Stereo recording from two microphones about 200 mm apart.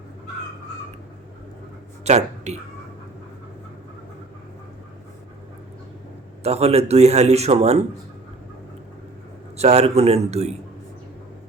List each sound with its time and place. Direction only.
2.0 s speech: 35° right (ahead or behind)
6.4 s a man's voice: 30° right (ahead or behind)
9.6 s a man's voice: 30° right (ahead or behind)